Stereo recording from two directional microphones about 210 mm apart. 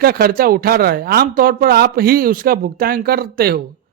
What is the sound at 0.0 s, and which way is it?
A man's voice, 45° right (ahead or behind).